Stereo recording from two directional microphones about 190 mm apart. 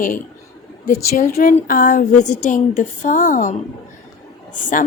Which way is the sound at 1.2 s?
45° left (ahead or behind).